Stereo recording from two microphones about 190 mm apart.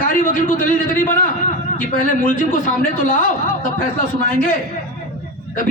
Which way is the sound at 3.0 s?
45° left (ahead or behind).